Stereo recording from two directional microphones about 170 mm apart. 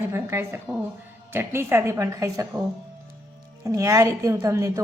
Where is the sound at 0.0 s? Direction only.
15° right (ahead or behind).